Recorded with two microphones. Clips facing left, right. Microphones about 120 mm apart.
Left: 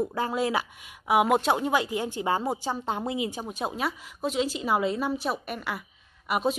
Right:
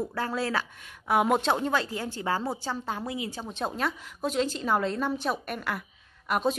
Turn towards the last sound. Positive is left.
turn(degrees=5)  # may be behind; listen again after turning